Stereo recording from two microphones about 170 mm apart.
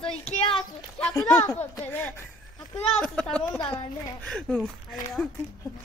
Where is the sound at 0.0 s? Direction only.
30° left (ahead or behind).